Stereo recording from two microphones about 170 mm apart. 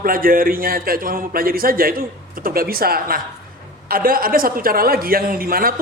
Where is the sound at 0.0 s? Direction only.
55° right (ahead or behind).